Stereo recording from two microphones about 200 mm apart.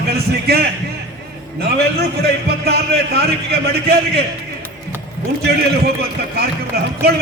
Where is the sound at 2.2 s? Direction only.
50° right (ahead or behind).